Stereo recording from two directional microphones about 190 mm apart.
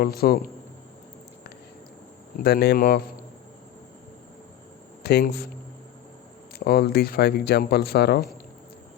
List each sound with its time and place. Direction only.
0.0 s speech: 50° left (ahead or behind)
2.4 s speech: 55° left (ahead or behind)
5.0 s speech: 60° left (ahead or behind)
6.7 s speech: 55° left (ahead or behind)